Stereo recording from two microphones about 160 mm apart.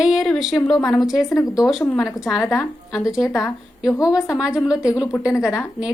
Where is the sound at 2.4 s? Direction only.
20° left (ahead or behind).